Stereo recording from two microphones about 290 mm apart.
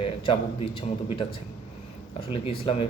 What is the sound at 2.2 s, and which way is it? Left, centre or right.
Speech, centre.